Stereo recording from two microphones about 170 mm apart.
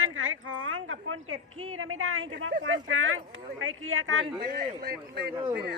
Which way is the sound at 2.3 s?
90° right.